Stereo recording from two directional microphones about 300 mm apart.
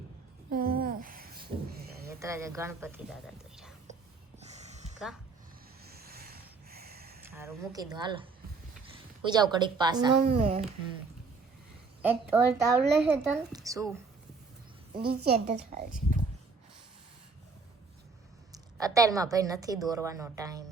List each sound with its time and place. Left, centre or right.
0.5 s a sound: right
2.0 s a woman's voice: centre
4.4 s snort: right
6.0 s a sound: right
7.3 s a woman's voice: centre
12.0 s a woman's voice: centre
14.9 s a woman's voice: right
18.5 s a woman's voice: centre